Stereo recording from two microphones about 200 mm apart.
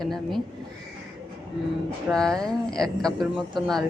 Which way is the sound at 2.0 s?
5° left (ahead or behind).